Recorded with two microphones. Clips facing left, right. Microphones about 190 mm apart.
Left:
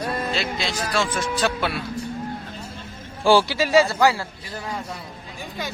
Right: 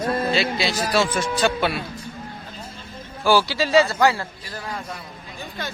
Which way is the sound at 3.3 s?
20° left (ahead or behind).